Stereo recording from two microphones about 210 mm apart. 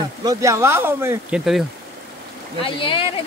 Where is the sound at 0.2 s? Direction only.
15° right (ahead or behind).